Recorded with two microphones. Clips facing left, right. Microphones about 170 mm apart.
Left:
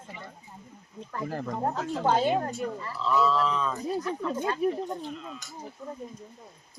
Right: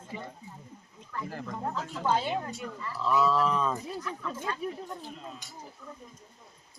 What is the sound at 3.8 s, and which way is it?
Speech, 35° left (ahead or behind).